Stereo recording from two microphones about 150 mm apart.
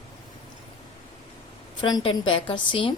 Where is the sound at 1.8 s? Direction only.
30° left (ahead or behind).